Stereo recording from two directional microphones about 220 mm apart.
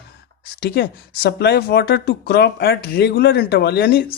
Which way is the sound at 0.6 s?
45° left (ahead or behind).